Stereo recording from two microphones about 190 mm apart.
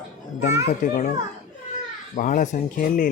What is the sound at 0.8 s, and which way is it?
Speech, 45° left (ahead or behind).